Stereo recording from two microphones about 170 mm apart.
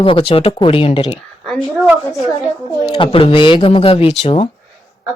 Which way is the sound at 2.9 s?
30° left (ahead or behind).